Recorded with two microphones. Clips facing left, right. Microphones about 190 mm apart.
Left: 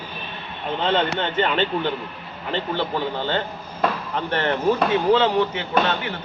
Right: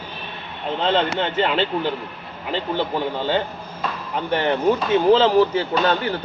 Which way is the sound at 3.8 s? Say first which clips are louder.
Left 6 dB; 60° left (ahead or behind).